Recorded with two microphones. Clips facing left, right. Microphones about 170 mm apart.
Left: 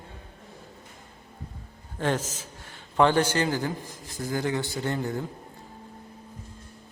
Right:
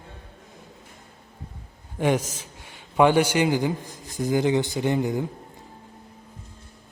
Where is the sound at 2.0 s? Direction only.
15° right (ahead or behind).